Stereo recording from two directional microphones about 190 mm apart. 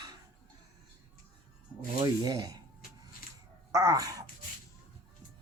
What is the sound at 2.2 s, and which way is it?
Speech, 20° right (ahead or behind).